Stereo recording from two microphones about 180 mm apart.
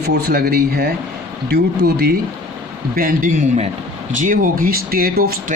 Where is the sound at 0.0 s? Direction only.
65° right (ahead or behind).